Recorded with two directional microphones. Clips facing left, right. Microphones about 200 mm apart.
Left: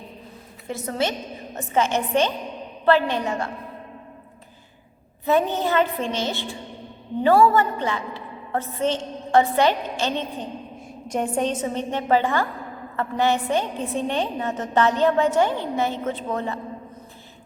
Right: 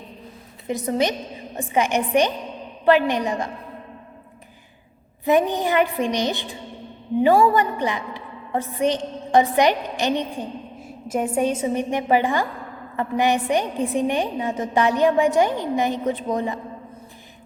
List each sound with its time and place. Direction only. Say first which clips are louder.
0.7 s a woman's voice: right 4 dB; 15° right (ahead or behind)
5.2 s a woman's voice: right 2 dB; 15° right (ahead or behind)